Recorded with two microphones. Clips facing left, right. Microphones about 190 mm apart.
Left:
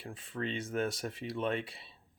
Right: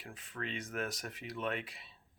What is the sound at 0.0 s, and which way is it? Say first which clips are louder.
Speech: left 6 dB; 30° left (ahead or behind).